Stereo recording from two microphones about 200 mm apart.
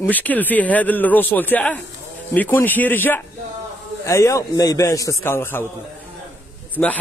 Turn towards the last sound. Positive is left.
turn(degrees=10)  # may be behind; listen again after turning